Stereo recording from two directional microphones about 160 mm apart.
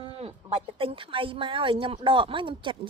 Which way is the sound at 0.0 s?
35° right (ahead or behind).